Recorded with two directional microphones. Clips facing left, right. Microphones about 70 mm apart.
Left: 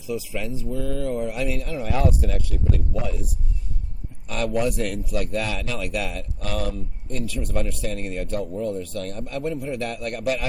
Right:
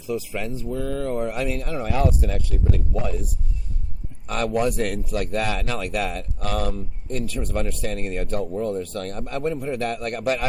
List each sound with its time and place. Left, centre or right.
0.0 s speech: right
2.9 s speech: right